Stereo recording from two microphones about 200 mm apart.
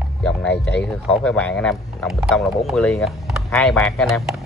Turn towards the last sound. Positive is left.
turn(degrees=0)  # may be behind; listen again after turning